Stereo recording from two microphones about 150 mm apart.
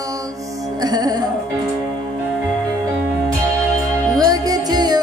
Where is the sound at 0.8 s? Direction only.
25° right (ahead or behind).